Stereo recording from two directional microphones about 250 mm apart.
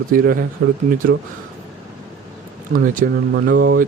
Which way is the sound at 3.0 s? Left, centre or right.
Right.